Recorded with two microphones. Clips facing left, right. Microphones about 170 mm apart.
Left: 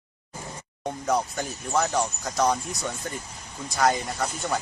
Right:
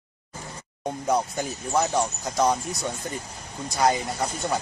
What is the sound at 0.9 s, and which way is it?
Speech, 15° right (ahead or behind).